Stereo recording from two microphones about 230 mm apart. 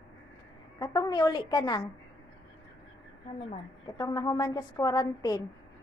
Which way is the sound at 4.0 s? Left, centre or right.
Centre.